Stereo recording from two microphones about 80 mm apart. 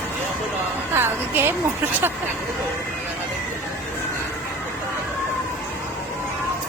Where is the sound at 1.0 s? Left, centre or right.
Right.